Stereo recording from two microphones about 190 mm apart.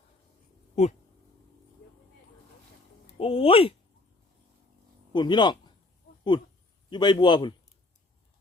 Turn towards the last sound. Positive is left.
turn(degrees=25)  # may be behind; listen again after turning